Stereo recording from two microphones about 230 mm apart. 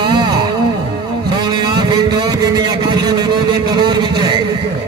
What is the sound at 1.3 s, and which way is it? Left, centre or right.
Speech, centre.